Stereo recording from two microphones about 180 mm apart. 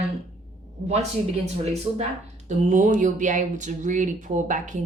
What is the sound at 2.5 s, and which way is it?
Speech, 45° right (ahead or behind).